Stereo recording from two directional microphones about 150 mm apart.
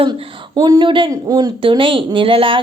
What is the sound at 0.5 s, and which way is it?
Speech, 25° right (ahead or behind).